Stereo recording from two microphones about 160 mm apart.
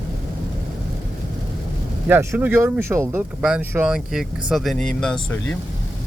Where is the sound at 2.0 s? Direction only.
15° right (ahead or behind).